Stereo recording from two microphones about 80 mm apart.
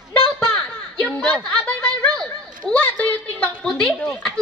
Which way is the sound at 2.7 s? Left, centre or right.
Centre.